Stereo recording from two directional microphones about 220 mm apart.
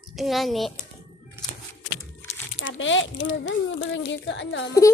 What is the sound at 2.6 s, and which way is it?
Speech, 60° left (ahead or behind).